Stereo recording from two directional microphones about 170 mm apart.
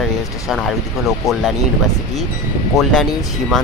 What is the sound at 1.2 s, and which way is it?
Speech, 20° left (ahead or behind).